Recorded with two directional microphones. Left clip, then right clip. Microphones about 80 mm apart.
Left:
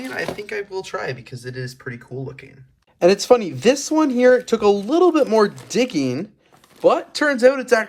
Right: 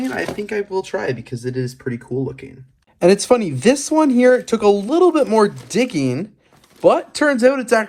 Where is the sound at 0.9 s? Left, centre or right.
Right.